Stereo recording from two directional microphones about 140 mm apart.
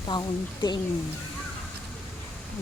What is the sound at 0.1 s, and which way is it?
Speech, 30° left (ahead or behind).